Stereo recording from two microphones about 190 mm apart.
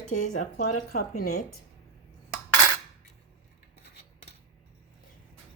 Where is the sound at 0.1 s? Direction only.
40° left (ahead or behind).